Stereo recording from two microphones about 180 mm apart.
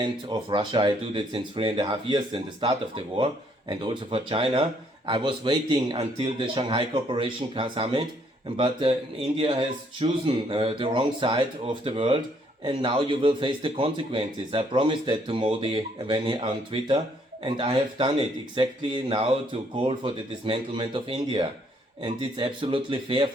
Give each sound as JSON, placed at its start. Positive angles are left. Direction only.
{"t": 0.0, "sound": "a man's voice", "side_deg": -25}